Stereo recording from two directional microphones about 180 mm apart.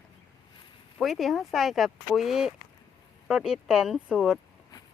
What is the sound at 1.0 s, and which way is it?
Speech, centre (ahead or behind).